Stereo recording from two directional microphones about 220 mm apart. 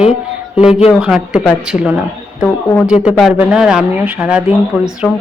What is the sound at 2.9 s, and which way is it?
Speech, centre (ahead or behind).